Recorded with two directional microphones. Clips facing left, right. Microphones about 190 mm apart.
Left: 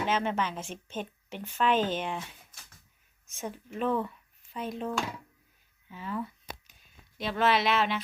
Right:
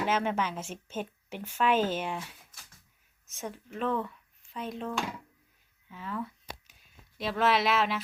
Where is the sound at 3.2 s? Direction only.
Centre (ahead or behind).